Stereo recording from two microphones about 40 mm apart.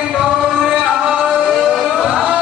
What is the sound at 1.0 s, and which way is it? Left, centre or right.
Music, right.